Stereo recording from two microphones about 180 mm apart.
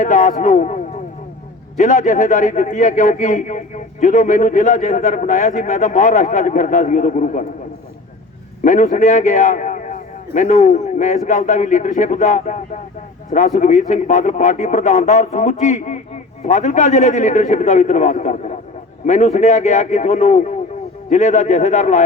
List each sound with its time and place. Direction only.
0.0 s a man's voice: 45° left (ahead or behind)
8.6 s a man's voice: 45° left (ahead or behind)